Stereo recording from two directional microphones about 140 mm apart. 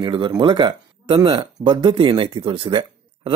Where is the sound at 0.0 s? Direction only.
35° right (ahead or behind).